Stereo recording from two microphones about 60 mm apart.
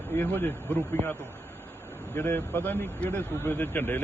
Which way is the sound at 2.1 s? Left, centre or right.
Left.